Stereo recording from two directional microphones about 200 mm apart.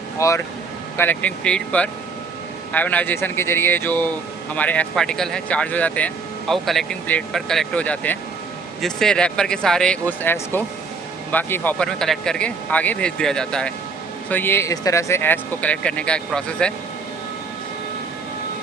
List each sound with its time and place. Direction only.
0.2 s speech: 15° left (ahead or behind)